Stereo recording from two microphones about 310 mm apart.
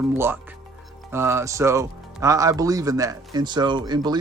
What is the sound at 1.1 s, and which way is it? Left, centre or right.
Speech, centre.